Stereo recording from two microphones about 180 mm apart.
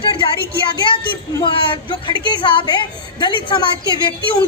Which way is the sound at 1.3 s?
25° left (ahead or behind).